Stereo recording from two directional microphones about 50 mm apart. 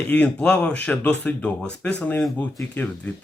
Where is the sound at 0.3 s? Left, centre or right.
Left.